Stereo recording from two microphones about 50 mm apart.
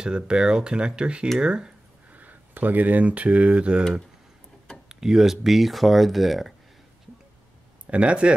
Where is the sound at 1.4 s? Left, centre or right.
Centre.